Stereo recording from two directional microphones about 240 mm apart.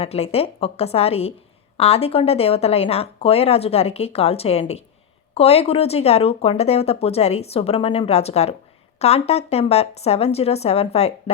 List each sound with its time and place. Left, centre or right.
0.0 s speech: left